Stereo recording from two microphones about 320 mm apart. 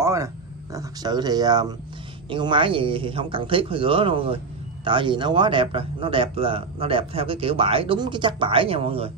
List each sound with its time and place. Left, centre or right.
0.0 s wild animals: centre
0.7 s speech: centre